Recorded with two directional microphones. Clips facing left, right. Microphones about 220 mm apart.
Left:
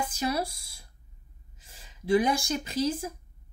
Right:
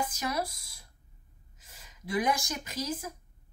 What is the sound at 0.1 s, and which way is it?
A woman's voice, 30° left (ahead or behind).